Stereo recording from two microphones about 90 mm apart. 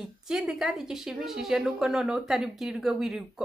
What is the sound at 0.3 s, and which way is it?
A woman's voice, 5° right (ahead or behind).